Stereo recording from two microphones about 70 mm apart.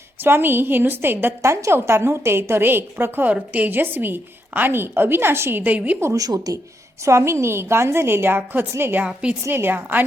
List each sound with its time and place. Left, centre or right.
0.2 s a woman's voice: right
1.4 s a woman's voice: right
6.0 s speech: right
7.0 s a woman's voice: right